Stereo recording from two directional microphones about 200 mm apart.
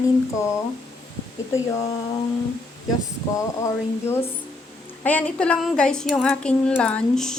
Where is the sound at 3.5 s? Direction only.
15° left (ahead or behind).